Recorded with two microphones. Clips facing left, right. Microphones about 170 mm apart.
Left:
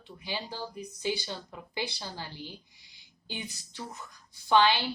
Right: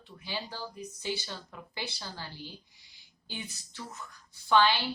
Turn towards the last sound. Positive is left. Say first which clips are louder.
# left 1 dB
turn(degrees=15)  # may be behind; listen again after turning